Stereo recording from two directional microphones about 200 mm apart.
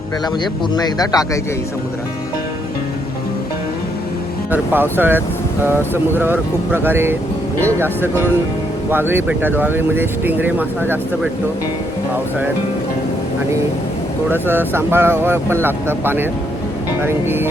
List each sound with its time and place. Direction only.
0.8 s speech: 20° left (ahead or behind)
4.5 s speech: 10° right (ahead or behind)
14.4 s speech: 10° right (ahead or behind)